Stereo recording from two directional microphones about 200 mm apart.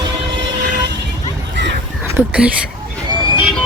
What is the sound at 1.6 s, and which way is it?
Crow, 60° right (ahead or behind).